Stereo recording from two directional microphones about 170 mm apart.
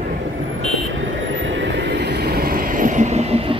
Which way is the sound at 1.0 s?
90° right.